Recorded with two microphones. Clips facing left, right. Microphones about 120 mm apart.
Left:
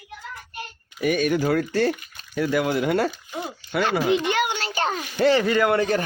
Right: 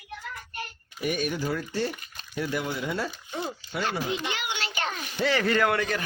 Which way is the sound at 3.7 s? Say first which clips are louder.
Left 10 dB; 85° left.